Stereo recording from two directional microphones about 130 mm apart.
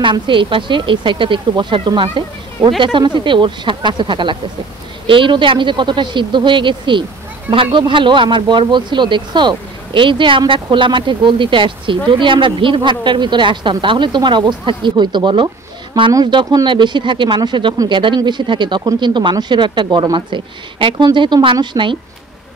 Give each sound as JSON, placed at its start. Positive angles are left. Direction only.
{"t": 0.0, "sound": "speech", "side_deg": -40}